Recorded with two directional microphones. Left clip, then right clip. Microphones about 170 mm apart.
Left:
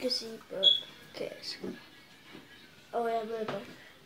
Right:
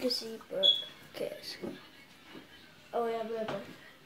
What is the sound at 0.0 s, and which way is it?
Speech, 15° right (ahead or behind).